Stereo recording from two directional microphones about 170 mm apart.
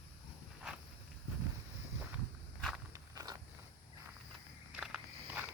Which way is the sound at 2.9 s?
20° right (ahead or behind).